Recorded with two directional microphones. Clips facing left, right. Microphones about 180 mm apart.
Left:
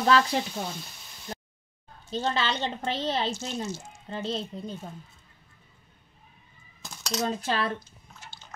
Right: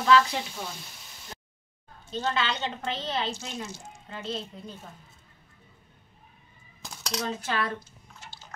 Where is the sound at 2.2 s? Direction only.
35° left (ahead or behind).